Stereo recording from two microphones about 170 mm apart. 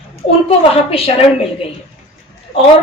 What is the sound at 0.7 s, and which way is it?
Speech, 35° left (ahead or behind).